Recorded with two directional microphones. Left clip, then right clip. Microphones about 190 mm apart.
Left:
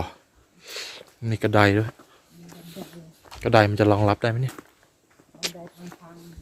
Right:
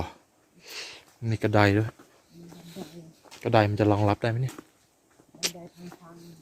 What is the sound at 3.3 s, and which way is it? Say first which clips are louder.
Speech: left 4 dB; 15° left (ahead or behind).